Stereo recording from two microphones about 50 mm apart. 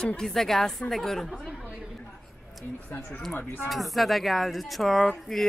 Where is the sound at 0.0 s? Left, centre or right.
Centre.